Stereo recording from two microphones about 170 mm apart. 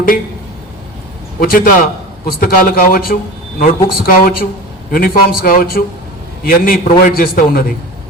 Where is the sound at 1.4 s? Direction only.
55° left (ahead or behind).